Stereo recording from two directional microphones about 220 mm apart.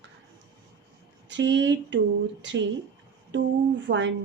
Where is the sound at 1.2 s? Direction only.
55° right (ahead or behind).